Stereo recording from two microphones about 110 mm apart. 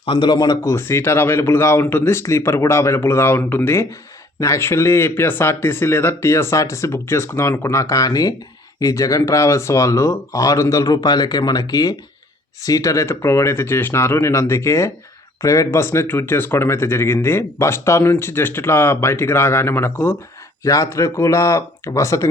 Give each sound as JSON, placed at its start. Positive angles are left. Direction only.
{"t": 0.0, "sound": "speech", "side_deg": 45}